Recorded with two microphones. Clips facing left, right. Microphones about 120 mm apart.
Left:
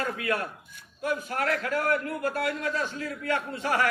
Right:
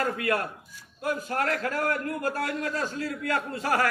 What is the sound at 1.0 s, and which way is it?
A man's voice, 40° right (ahead or behind).